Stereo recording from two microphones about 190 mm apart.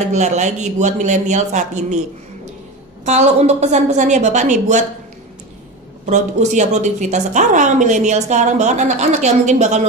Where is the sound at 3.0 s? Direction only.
35° right (ahead or behind).